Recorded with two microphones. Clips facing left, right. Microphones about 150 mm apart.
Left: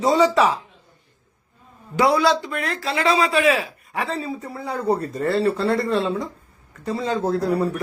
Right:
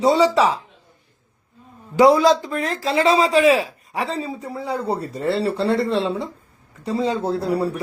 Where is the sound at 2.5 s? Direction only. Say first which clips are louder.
Right 4 dB; 40° right (ahead or behind).